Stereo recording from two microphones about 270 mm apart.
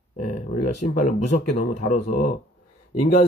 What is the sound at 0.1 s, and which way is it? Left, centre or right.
Speech, left.